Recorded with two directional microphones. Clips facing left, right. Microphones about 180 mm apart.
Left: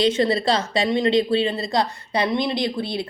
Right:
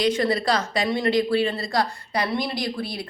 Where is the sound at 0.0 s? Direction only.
25° left (ahead or behind).